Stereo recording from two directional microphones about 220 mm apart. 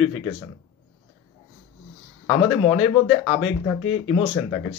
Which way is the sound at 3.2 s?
20° left (ahead or behind).